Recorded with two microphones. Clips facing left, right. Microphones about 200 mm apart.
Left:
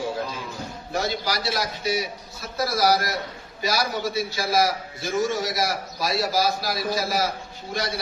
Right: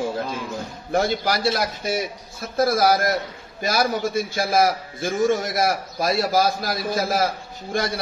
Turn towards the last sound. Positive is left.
turn(degrees=-50)  # may be behind; listen again after turning